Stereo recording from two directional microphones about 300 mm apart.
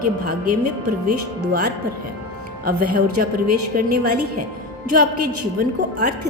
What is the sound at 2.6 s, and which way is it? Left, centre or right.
Speech, right.